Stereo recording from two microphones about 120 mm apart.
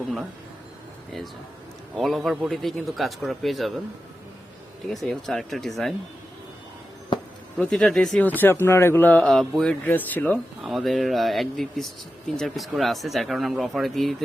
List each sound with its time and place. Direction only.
2.0 s a man's voice: centre (ahead or behind)
5.0 s a man's voice: centre (ahead or behind)
7.6 s a man's voice: 5° left (ahead or behind)
8.2 s speech: 15° left (ahead or behind)
9.8 s speech: 15° left (ahead or behind)
10.6 s a man's voice: centre (ahead or behind)